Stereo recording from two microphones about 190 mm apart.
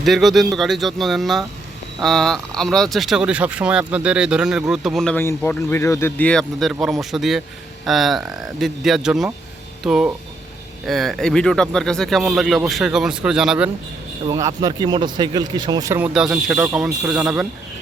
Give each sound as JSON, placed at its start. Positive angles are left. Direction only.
{"t": 0.0, "sound": "speech", "side_deg": 0}
{"t": 14.3, "sound": "speech", "side_deg": -20}
{"t": 16.1, "sound": "speech", "side_deg": -5}